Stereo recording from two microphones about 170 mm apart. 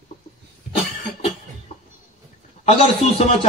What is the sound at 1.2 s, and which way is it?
Cough, 40° left (ahead or behind).